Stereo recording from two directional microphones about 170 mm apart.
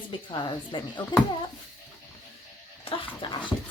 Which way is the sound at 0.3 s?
25° left (ahead or behind).